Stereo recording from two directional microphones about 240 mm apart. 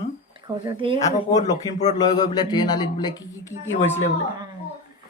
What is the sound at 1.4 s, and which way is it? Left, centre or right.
Speech, centre.